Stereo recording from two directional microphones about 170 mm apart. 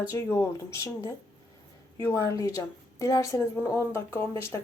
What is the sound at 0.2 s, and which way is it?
Speech, 15° left (ahead or behind).